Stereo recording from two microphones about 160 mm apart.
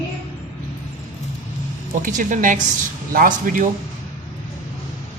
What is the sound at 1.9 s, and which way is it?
Speech, 55° right (ahead or behind).